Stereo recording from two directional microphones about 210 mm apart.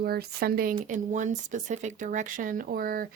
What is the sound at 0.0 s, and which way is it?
Speech, 50° right (ahead or behind).